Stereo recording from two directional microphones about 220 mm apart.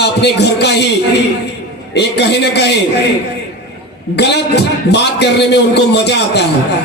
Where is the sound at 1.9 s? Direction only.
50° left (ahead or behind).